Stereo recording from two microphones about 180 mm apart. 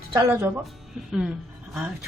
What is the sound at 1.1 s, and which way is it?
Speech, 5° right (ahead or behind).